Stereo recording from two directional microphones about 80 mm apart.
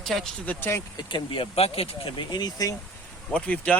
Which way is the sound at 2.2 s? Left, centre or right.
Left.